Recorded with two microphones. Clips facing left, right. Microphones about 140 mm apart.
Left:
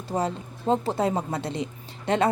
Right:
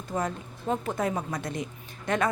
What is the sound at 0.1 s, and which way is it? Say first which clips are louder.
A woman's voice: left 3 dB; 30° left (ahead or behind).